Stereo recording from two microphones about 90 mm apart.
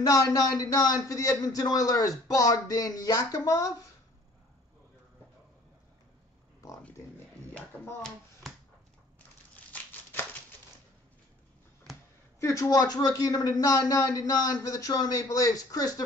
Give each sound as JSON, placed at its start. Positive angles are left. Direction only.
{"t": 0.0, "sound": "speech", "side_deg": 45}
{"t": 12.4, "sound": "speech", "side_deg": 35}